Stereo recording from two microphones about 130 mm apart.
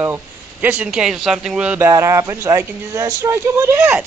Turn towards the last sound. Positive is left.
turn(degrees=-20)  # may be behind; listen again after turning